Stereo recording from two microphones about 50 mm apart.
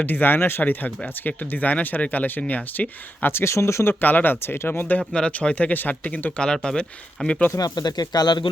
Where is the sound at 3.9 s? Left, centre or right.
Left.